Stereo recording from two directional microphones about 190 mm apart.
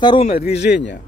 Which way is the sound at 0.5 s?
65° left (ahead or behind).